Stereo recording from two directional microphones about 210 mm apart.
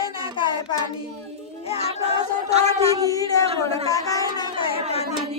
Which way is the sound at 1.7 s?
30° left (ahead or behind).